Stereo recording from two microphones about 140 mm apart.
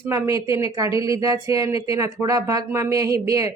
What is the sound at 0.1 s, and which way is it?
A woman's voice, 20° right (ahead or behind).